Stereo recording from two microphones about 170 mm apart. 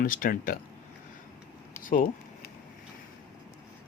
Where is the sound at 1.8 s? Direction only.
50° left (ahead or behind).